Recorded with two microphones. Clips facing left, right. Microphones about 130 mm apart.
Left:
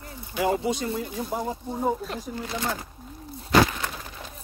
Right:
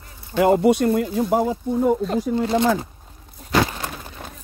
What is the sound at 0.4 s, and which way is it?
Speech, 60° right (ahead or behind).